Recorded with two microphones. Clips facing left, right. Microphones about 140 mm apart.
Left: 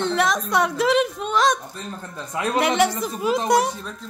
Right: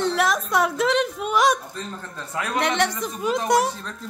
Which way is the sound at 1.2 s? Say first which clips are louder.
Even; 10° right (ahead or behind).